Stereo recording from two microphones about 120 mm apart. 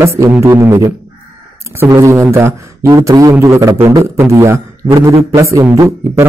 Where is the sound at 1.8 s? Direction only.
30° right (ahead or behind).